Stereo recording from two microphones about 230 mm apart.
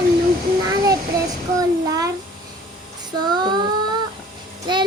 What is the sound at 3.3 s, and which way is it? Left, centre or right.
Child singing, centre.